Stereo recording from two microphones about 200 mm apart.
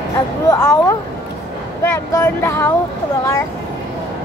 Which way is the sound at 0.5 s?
15° left (ahead or behind).